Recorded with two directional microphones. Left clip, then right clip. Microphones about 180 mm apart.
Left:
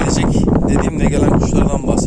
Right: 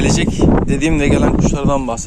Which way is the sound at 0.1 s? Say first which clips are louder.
Right 1 dB; 10° left (ahead or behind).